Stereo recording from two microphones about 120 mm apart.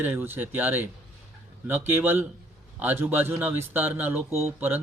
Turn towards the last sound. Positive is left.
turn(degrees=-15)  # may be behind; listen again after turning